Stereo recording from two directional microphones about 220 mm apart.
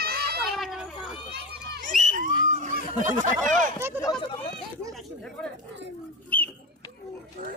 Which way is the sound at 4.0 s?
20° left (ahead or behind).